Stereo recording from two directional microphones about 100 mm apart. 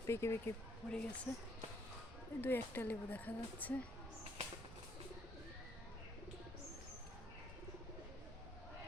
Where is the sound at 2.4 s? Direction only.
20° left (ahead or behind).